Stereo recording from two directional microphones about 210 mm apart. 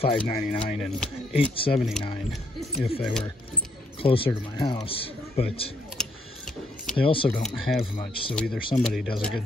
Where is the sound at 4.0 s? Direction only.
25° left (ahead or behind).